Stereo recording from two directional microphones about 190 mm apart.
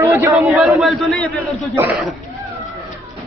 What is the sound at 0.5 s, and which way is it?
Speech, centre (ahead or behind).